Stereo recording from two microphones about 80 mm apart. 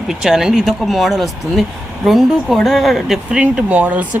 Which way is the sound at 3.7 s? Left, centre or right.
Centre.